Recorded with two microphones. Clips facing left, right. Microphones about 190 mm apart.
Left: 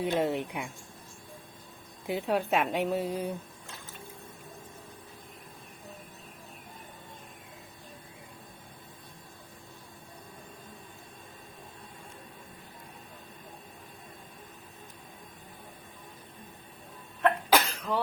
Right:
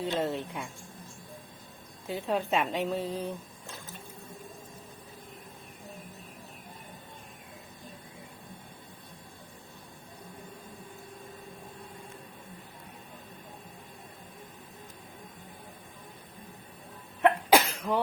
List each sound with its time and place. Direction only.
0.0 s a woman's voice: 15° left (ahead or behind)
2.0 s a woman's voice: 10° left (ahead or behind)
17.2 s cough: 10° right (ahead or behind)